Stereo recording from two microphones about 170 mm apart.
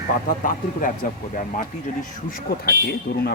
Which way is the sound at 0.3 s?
55° left (ahead or behind).